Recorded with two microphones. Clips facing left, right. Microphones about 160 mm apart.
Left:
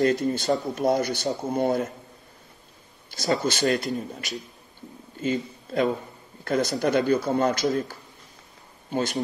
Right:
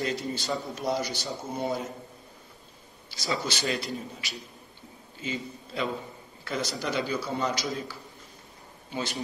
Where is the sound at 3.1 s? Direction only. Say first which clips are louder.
Left 7 dB; 45° left (ahead or behind).